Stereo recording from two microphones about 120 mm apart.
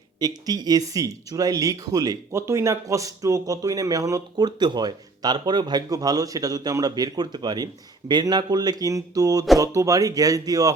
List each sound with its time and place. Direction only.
0.2 s speech: 35° right (ahead or behind)